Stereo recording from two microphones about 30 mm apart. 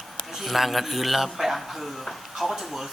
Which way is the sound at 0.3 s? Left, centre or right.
Centre.